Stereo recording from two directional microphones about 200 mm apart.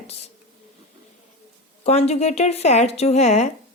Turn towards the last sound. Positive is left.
turn(degrees=35)  # may be behind; listen again after turning